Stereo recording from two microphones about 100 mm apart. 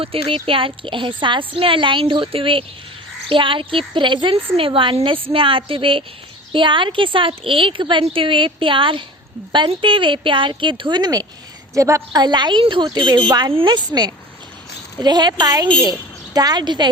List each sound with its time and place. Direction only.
0.0 s a woman's voice: 65° right (ahead or behind)
4.5 s a woman's voice: 65° right (ahead or behind); by 11.3 s 40° right (ahead or behind)
11.7 s a woman's voice: 30° right (ahead or behind)
12.1 s a woman's voice: 45° right (ahead or behind)